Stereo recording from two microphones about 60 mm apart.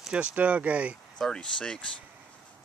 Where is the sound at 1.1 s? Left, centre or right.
Centre.